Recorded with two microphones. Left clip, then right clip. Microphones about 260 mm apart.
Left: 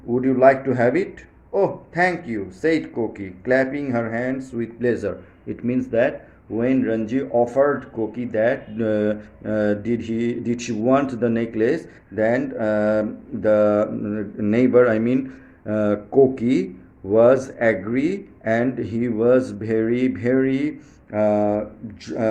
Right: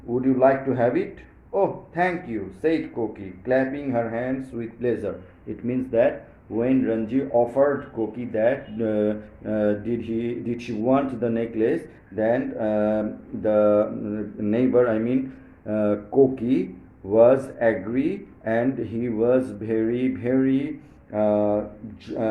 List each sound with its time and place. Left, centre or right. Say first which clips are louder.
0.1 s speech: left 4 dB; left